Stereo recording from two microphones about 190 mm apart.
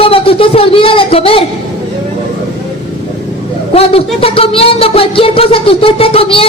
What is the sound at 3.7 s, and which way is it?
A woman's voice, 30° left (ahead or behind).